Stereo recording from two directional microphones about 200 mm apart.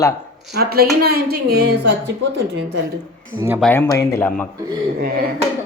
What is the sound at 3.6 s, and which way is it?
Speech, 10° left (ahead or behind).